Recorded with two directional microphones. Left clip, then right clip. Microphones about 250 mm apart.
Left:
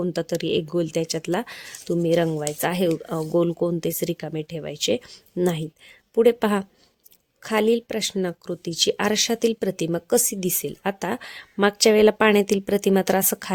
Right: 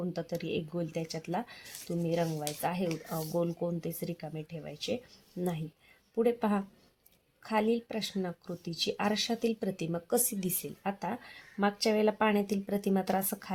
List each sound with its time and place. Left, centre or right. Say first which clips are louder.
0.0 s speech: left 11 dB; left